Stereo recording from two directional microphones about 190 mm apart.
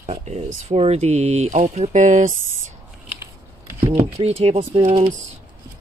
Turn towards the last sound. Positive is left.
turn(degrees=-35)  # may be behind; listen again after turning